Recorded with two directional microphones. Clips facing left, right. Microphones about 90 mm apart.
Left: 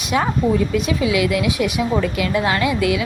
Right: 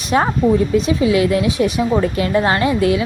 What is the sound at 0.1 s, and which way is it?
A woman's voice, 40° right (ahead or behind).